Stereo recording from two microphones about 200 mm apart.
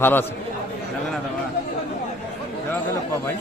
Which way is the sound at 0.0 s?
10° left (ahead or behind).